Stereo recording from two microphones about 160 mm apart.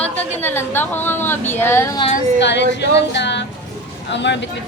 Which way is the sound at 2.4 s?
90° left.